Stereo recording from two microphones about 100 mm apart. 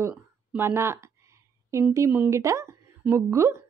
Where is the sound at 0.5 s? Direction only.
20° right (ahead or behind).